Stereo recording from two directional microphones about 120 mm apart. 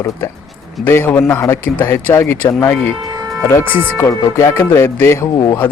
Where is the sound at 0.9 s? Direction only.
20° left (ahead or behind).